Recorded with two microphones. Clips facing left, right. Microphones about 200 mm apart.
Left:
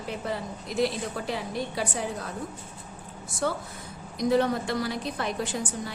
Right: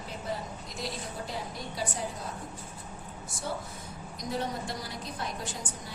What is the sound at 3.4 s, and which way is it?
A woman's voice, 70° left (ahead or behind).